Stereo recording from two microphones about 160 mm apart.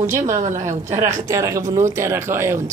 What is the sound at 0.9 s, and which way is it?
Speech, 20° right (ahead or behind).